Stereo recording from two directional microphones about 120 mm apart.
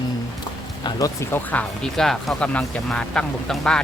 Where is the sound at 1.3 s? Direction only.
10° left (ahead or behind).